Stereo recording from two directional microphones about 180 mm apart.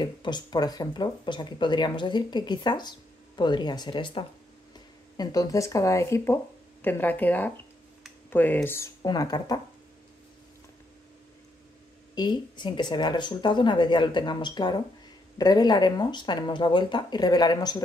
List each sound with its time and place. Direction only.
0.0 s speech: 25° left (ahead or behind)
12.2 s speech: 25° left (ahead or behind)